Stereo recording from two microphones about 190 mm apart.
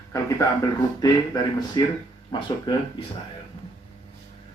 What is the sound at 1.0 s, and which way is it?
Speech, 20° left (ahead or behind).